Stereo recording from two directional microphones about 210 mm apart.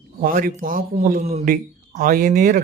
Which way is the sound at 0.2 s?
40° right (ahead or behind).